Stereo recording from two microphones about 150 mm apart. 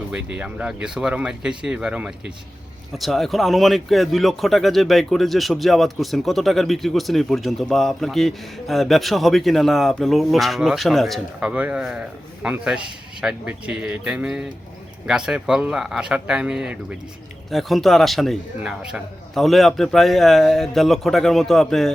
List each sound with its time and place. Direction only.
0.1 s speech: 10° right (ahead or behind)